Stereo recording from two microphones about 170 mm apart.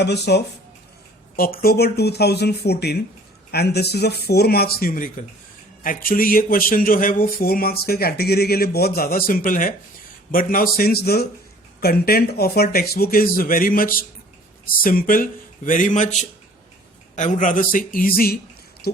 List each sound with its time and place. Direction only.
0.0 s speech: 80° left
1.4 s speech: 60° left (ahead or behind)